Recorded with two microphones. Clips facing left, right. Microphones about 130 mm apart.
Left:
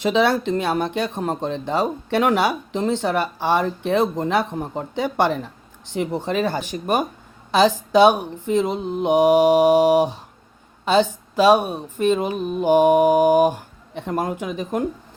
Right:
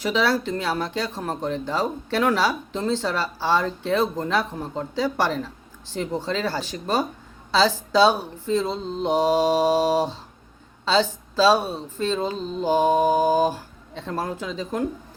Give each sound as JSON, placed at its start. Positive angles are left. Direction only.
{"t": 0.0, "sound": "speech", "side_deg": 25}